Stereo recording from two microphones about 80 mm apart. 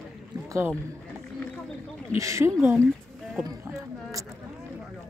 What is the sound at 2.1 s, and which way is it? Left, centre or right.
Speech, right.